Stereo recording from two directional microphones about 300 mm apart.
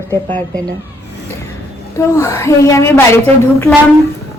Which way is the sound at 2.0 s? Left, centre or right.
Centre.